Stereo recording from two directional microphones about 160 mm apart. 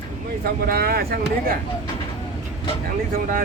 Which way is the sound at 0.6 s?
70° right (ahead or behind).